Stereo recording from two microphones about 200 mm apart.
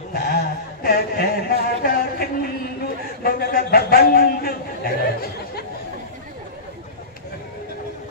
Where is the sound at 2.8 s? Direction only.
50° left (ahead or behind).